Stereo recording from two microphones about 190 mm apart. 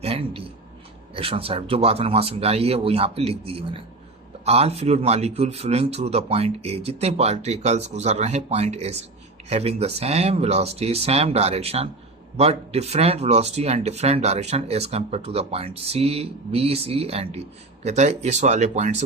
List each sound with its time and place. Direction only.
0.0 s speech: 30° right (ahead or behind)